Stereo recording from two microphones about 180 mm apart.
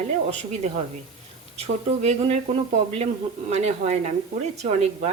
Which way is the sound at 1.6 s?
35° right (ahead or behind).